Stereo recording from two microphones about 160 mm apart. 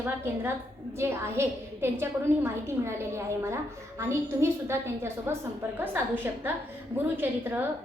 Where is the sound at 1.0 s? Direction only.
15° right (ahead or behind).